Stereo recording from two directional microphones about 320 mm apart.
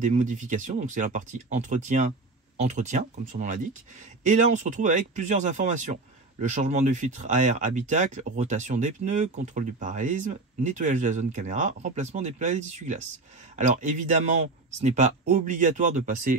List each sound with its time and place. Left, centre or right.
0.0 s speech: right